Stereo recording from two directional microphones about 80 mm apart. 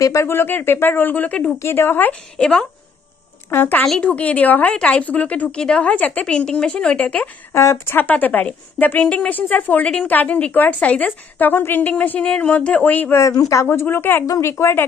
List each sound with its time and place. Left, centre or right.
0.0 s speech: left
0.3 s a woman's voice: left
1.6 s a woman's voice: left
2.3 s a woman's voice: centre
3.4 s a woman's voice: left
7.5 s a woman's voice: left
13.1 s speech: left
13.7 s a woman's voice: left